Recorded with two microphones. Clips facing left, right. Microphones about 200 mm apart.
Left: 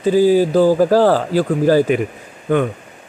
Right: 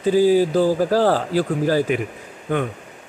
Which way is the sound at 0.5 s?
50° left (ahead or behind).